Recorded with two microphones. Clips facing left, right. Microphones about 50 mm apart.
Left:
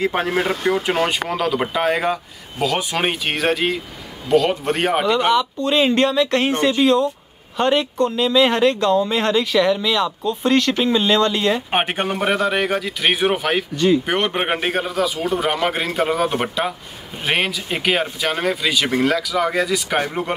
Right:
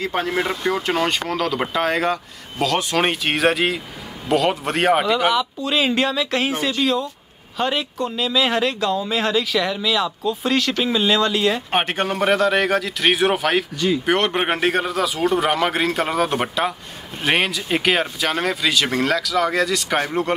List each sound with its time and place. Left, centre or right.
0.0 s speech: left
0.3 s a man's voice: centre
11.8 s a man's voice: centre